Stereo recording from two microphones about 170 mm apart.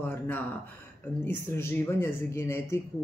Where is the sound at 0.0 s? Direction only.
10° left (ahead or behind).